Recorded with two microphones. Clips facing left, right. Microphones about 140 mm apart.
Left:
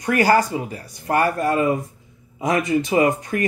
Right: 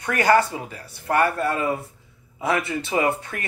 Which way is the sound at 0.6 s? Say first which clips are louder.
Left 2 dB; 35° left (ahead or behind).